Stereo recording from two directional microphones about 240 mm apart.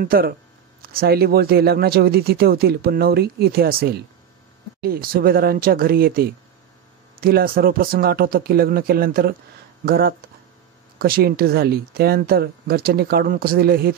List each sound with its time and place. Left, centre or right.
0.0 s speech: right